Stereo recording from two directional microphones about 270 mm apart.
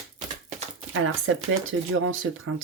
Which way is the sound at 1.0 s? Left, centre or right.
Right.